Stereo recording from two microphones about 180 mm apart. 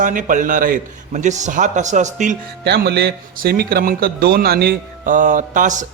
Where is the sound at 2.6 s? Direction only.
65° right (ahead or behind); by 5.9 s 45° right (ahead or behind).